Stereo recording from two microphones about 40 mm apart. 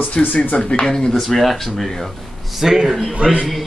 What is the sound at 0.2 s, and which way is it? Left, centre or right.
Speech, centre.